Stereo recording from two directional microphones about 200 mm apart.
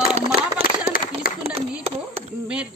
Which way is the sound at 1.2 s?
45° left (ahead or behind).